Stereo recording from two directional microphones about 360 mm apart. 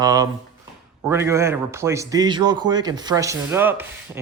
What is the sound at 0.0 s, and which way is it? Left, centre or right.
A man's voice, centre.